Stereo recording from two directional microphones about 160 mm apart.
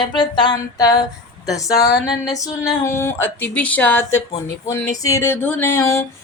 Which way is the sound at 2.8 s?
15° left (ahead or behind).